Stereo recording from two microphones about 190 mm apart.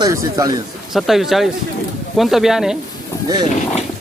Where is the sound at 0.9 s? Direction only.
Centre (ahead or behind).